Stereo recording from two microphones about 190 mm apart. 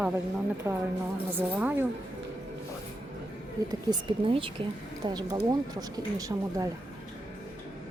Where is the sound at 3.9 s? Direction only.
25° right (ahead or behind).